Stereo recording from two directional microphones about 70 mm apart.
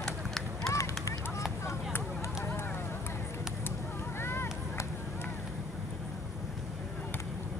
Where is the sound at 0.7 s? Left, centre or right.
Left.